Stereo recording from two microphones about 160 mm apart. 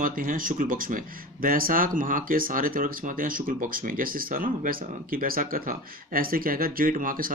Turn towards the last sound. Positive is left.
turn(degrees=-60)  # may be behind; listen again after turning